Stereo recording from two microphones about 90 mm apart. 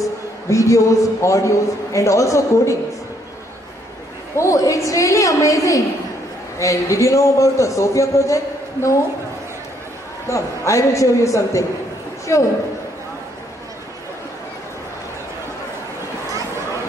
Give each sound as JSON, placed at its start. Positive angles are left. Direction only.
{"t": 0.0, "sound": "a man's voice", "side_deg": 35}
{"t": 4.4, "sound": "a man's voice", "side_deg": 35}
{"t": 10.2, "sound": "a man's voice", "side_deg": 35}